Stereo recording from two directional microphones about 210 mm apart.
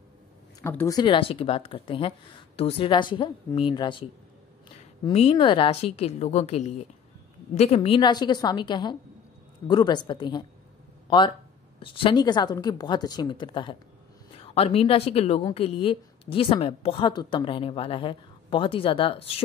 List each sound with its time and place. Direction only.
0.6 s a woman's voice: 15° left (ahead or behind)